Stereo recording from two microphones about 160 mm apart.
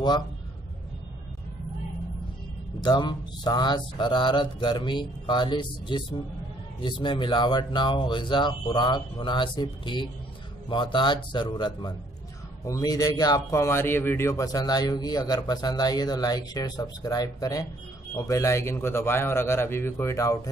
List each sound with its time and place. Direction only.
2.8 s a man's voice: 25° left (ahead or behind)